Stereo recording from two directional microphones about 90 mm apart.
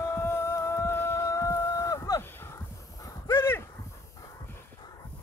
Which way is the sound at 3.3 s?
30° left (ahead or behind).